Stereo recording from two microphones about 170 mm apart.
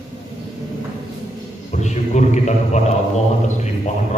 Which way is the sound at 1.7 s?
45° left (ahead or behind).